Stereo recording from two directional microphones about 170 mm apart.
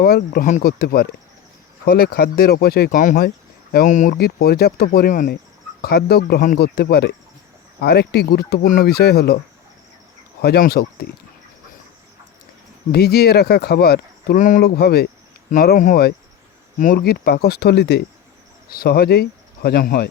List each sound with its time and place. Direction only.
0.0 s speech: 65° left (ahead or behind)
0.8 s speech: 65° left (ahead or behind)
3.2 s a sound: 65° left (ahead or behind)
3.8 s speech: 50° left (ahead or behind)
4.2 s speech: 65° left (ahead or behind)
5.8 s speech: 65° left (ahead or behind)
8.6 s speech: 55° left (ahead or behind); by 9.4 s 70° left (ahead or behind)
10.4 s speech: 70° left (ahead or behind)
12.9 s speech: 70° left (ahead or behind)
14.3 s speech: 50° left (ahead or behind)